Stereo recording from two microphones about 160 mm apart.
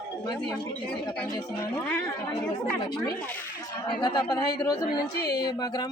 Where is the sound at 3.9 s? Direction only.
30° left (ahead or behind).